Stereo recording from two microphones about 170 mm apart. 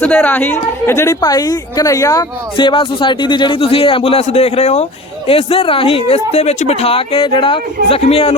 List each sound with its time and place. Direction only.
0.0 s a woman's voice: 10° left (ahead or behind); by 8.4 s 35° left (ahead or behind)